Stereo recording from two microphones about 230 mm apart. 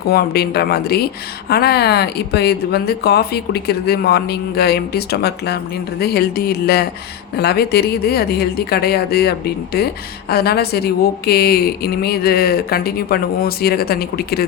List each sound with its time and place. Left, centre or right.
0.1 s speech: left